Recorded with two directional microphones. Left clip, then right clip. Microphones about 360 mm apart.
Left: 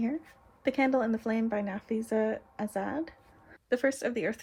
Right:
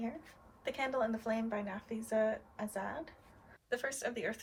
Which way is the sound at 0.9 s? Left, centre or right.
Left.